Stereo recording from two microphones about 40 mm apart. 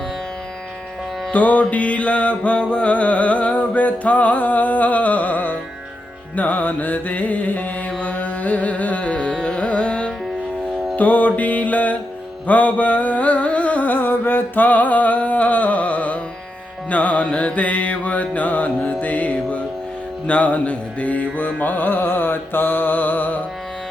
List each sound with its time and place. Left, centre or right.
1.3 s music: left
6.3 s mantra: left
10.9 s music: left